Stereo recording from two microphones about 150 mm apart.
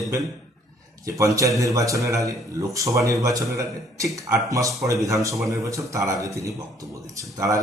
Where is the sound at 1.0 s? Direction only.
20° right (ahead or behind).